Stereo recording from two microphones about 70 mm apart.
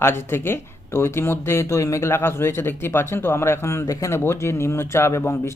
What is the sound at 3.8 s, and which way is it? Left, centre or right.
Speech, left.